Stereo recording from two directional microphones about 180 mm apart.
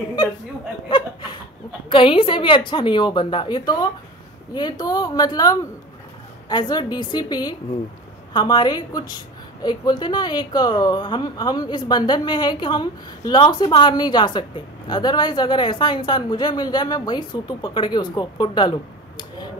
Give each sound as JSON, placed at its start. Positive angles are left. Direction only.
{"t": 0.8, "sound": "chuckle", "side_deg": 25}
{"t": 1.9, "sound": "a woman's voice", "side_deg": 30}